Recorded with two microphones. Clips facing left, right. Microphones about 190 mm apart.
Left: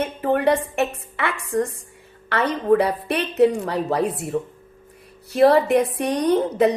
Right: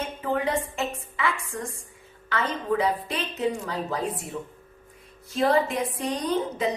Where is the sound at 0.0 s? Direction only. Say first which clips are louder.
Left 7 dB; 70° left (ahead or behind).